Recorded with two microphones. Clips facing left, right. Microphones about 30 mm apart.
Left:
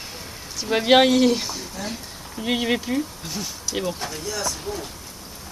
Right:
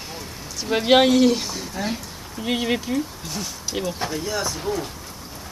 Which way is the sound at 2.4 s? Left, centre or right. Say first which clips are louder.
Even; centre.